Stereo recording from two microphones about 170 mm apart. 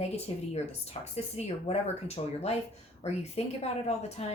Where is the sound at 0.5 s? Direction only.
40° left (ahead or behind).